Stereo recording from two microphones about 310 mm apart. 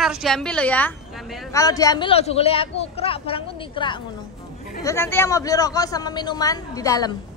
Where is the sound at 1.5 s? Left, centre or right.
Centre.